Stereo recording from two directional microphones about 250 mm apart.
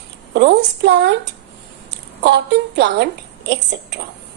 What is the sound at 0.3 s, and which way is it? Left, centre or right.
Speech, right.